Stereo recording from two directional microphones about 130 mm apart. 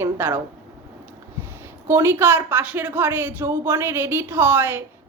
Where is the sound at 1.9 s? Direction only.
20° right (ahead or behind).